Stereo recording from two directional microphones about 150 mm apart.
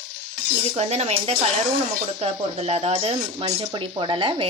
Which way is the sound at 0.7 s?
45° right (ahead or behind).